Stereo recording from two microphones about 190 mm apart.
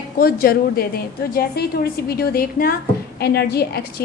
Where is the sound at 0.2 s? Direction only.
50° left (ahead or behind).